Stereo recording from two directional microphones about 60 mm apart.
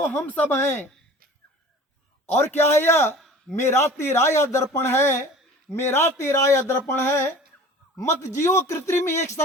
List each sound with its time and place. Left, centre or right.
0.1 s speech: left
2.5 s a man's voice: left
6.7 s a man's voice: left
7.9 s a man's voice: left